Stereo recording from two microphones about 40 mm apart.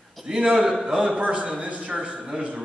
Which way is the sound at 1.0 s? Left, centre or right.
Right.